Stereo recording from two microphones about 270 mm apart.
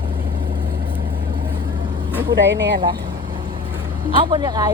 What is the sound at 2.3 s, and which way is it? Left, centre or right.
Speech, right.